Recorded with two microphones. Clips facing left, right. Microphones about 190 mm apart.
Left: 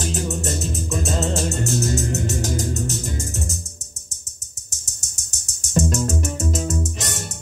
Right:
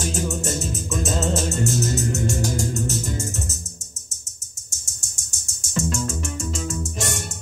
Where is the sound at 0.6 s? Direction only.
Centre (ahead or behind).